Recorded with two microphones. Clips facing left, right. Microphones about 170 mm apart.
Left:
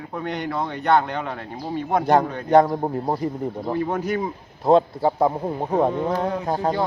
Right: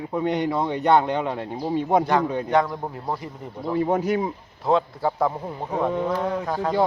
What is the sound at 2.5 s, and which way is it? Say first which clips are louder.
Speech: left 9 dB; 40° left (ahead or behind).